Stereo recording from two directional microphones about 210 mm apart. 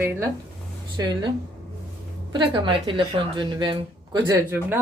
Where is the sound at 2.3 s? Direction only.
20° right (ahead or behind).